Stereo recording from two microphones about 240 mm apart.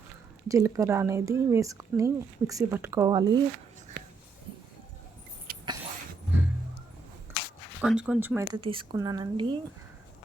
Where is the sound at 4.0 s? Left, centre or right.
Right.